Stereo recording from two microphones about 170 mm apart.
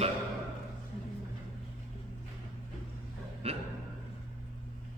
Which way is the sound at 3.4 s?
35° right (ahead or behind).